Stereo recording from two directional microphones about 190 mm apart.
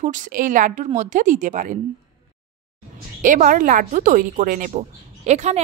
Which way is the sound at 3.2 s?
45° right (ahead or behind).